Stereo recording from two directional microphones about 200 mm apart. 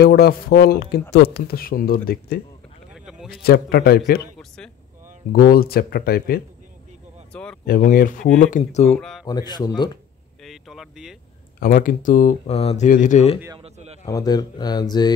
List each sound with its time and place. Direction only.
0.0 s speech: 50° left (ahead or behind)
2.9 s a sound: 5° right (ahead or behind)
3.4 s speech: 50° left (ahead or behind)
5.3 s speech: 50° left (ahead or behind)
7.6 s speech: 50° left (ahead or behind)
8.9 s a man's voice: 5° left (ahead or behind)
9.2 s speech: 20° left (ahead or behind)
10.4 s boat: centre (ahead or behind)
11.6 s speech: 45° left (ahead or behind)
13.6 s a sound: 30° right (ahead or behind)
14.0 s speech: 20° left (ahead or behind)